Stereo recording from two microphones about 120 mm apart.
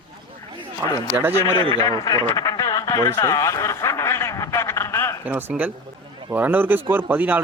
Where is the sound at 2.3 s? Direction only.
30° left (ahead or behind).